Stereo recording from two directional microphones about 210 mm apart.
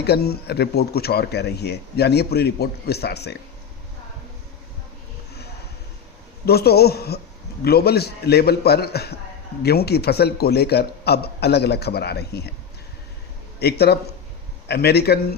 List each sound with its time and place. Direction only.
0.0 s speech: 50° left (ahead or behind)
6.4 s speech: 50° left (ahead or behind)
13.6 s speech: 50° left (ahead or behind)